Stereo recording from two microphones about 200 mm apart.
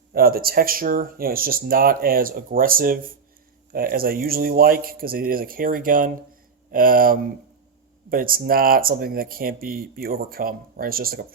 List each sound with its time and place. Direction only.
0.1 s speech: 50° right (ahead or behind)